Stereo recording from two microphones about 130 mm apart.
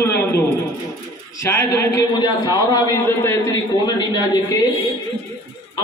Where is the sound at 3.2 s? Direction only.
20° left (ahead or behind).